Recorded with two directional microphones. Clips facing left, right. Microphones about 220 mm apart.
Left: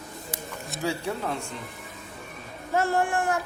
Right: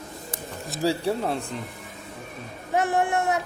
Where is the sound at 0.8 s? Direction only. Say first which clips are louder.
Right 5 dB; 35° right (ahead or behind).